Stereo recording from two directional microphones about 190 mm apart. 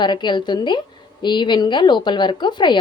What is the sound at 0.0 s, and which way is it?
Speech, 25° left (ahead or behind).